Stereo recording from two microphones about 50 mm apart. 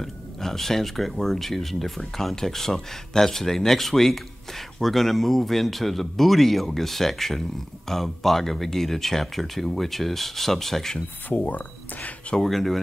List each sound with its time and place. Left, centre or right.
0.0 s speech: centre
11.2 s speech: left
12.4 s speech: centre